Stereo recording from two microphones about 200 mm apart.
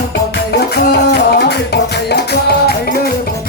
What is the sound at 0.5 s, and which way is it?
Music, 55° left (ahead or behind).